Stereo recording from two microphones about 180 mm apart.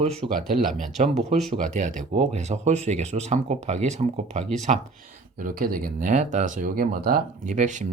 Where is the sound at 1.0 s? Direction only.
40° right (ahead or behind).